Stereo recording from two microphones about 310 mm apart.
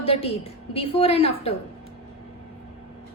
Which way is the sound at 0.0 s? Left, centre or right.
Centre.